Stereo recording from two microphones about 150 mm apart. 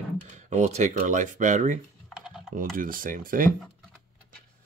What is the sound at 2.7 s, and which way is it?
Speech, 70° right (ahead or behind).